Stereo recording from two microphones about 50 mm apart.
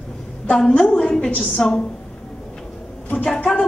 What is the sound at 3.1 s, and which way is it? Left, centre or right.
Speech, centre.